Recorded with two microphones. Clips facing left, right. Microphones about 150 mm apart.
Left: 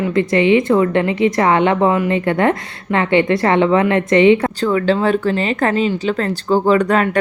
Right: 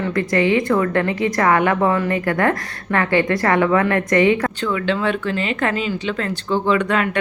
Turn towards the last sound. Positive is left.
turn(degrees=40)  # may be behind; listen again after turning